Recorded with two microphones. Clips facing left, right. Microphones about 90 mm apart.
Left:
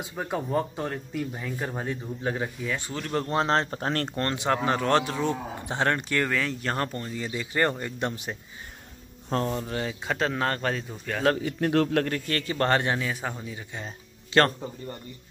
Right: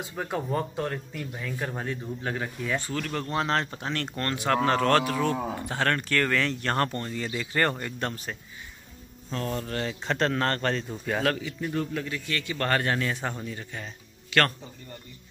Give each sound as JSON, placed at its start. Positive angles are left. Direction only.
{"t": 0.1, "sound": "speech", "side_deg": 5}
{"t": 3.1, "sound": "speech", "side_deg": 30}
{"t": 4.2, "sound": "speech", "side_deg": 25}
{"t": 9.5, "sound": "speech", "side_deg": 10}
{"t": 11.6, "sound": "a man's voice", "side_deg": 80}
{"t": 12.1, "sound": "speech", "side_deg": 40}
{"t": 13.0, "sound": "speech", "side_deg": 5}
{"t": 13.8, "sound": "a sound", "side_deg": 30}